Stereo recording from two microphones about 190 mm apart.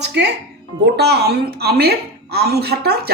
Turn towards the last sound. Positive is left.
turn(degrees=-60)  # may be behind; listen again after turning